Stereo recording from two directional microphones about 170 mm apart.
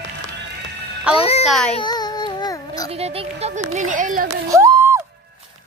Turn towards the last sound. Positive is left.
turn(degrees=-15)  # may be behind; listen again after turning